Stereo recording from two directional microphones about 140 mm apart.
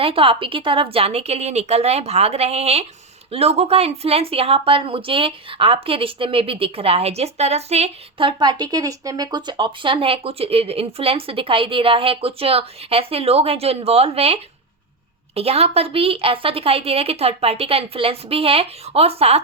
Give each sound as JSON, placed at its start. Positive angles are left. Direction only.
{"t": 0.0, "sound": "a woman's voice", "side_deg": -40}